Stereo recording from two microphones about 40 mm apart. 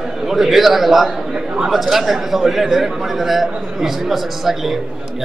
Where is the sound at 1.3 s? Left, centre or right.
Centre.